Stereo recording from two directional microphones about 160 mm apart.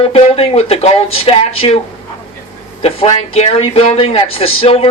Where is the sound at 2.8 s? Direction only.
40° left (ahead or behind).